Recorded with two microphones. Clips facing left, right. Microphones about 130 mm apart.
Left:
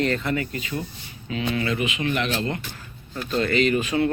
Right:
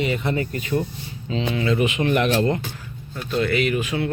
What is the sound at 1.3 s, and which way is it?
Speech, 25° right (ahead or behind).